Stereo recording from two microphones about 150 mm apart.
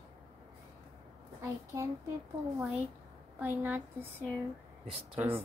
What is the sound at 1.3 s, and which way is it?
Speech, 20° right (ahead or behind).